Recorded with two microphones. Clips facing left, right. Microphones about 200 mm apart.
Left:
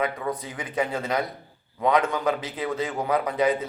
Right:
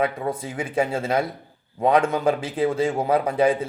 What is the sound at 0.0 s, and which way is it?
Speech, 30° right (ahead or behind).